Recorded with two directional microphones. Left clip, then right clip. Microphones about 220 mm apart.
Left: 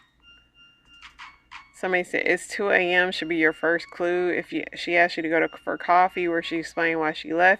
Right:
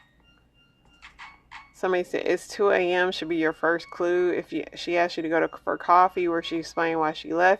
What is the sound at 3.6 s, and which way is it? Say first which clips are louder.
Speech: left 1 dB; 20° left (ahead or behind).